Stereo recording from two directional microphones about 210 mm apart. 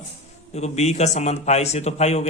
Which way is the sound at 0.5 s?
30° left (ahead or behind).